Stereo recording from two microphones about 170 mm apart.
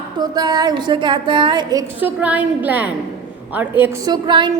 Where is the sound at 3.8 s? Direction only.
25° right (ahead or behind).